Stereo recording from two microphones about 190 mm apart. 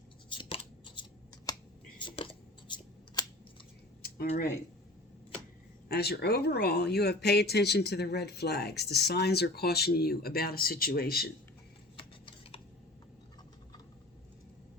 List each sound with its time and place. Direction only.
0.3 s scissors: 25° left (ahead or behind)
2.0 s a sound: 25° left (ahead or behind)
5.9 s speech: 55° left (ahead or behind)
11.9 s tick-tock: 25° left (ahead or behind)